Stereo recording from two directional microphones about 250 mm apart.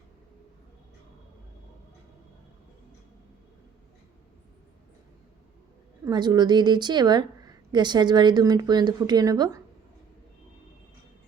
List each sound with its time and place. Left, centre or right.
6.1 s a woman's voice: centre